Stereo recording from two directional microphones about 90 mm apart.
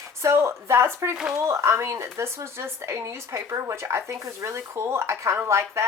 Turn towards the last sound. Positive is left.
turn(degrees=-30)  # may be behind; listen again after turning